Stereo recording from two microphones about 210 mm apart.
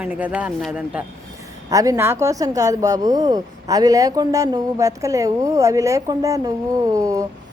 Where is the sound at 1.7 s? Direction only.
15° right (ahead or behind).